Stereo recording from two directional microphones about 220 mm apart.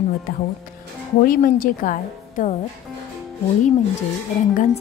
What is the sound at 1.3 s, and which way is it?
Speech, 40° left (ahead or behind).